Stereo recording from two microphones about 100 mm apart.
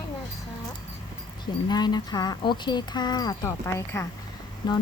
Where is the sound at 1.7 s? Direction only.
45° left (ahead or behind).